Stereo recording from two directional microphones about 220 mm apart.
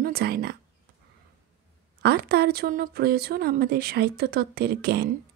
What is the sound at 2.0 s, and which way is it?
Speech, 45° right (ahead or behind).